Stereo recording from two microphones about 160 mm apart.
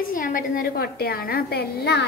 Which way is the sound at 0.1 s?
60° left (ahead or behind).